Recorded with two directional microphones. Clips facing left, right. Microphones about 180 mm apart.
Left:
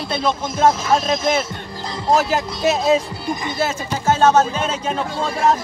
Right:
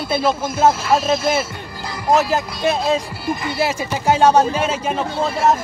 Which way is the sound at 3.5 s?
10° right (ahead or behind).